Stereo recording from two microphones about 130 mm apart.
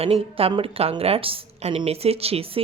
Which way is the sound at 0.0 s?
50° right (ahead or behind).